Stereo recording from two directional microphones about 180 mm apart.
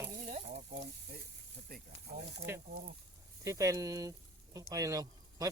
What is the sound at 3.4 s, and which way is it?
Speech, 15° right (ahead or behind).